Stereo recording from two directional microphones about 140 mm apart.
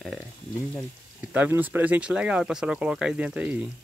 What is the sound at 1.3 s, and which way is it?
Speech, 10° right (ahead or behind).